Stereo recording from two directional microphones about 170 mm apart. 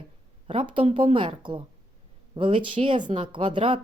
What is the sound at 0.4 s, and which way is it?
A woman's voice, 30° right (ahead or behind).